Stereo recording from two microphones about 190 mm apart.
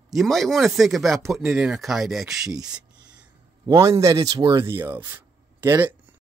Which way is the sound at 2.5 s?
20° right (ahead or behind).